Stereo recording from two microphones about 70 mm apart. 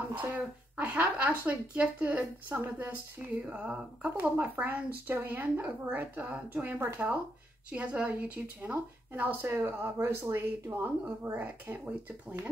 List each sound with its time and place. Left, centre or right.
0.1 s a woman's voice: right
9.5 s speech: right